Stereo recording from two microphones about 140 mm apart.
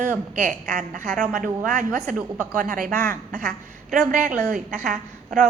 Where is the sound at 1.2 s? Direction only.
85° right.